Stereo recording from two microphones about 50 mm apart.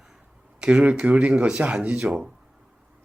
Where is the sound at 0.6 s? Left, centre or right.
Right.